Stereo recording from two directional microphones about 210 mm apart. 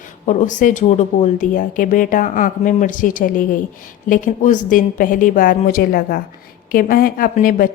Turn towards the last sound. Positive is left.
turn(degrees=40)  # may be behind; listen again after turning